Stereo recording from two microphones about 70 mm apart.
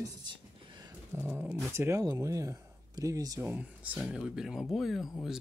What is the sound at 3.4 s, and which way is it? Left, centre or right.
Speech, right.